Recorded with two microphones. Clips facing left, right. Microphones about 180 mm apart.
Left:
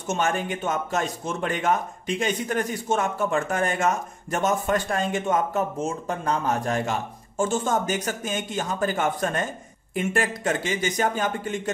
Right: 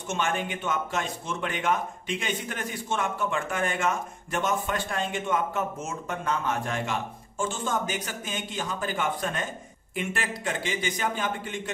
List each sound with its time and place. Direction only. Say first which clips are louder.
0.1 s a man's voice: left 4 dB; 40° left (ahead or behind)